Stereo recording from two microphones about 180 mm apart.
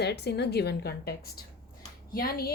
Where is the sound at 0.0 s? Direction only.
65° left (ahead or behind).